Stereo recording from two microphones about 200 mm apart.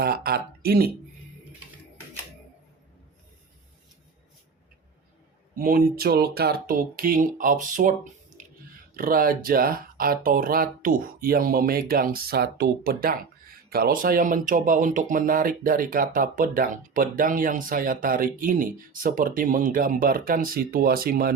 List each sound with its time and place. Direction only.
0.0 s speech: 50° right (ahead or behind)
5.5 s speech: 45° right (ahead or behind)
9.0 s speech: 45° right (ahead or behind)